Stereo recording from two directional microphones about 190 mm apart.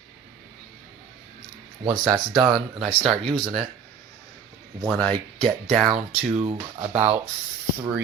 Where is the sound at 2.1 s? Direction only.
20° right (ahead or behind).